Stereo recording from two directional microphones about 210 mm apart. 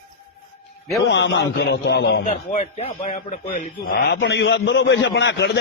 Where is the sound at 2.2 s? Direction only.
35° left (ahead or behind); by 5.5 s 55° left (ahead or behind).